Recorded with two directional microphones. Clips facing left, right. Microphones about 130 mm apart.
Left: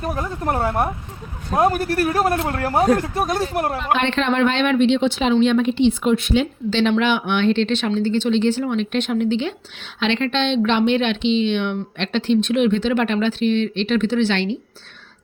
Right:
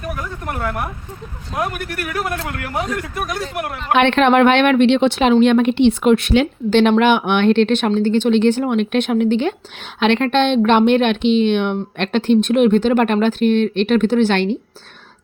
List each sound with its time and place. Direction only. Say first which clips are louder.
0.0 s a sound: left 3 dB; 30° left (ahead or behind)
1.5 s speech: left 6 dB; 30° left (ahead or behind)
3.9 s a woman's voice: right 8 dB; 60° right (ahead or behind)